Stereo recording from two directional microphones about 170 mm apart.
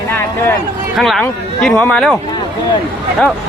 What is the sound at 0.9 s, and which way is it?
Speech, centre (ahead or behind).